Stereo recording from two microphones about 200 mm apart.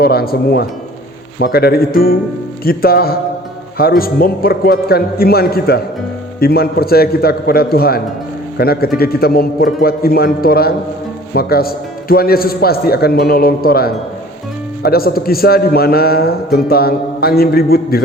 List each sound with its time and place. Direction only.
0.0 s a man's voice: 50° left (ahead or behind)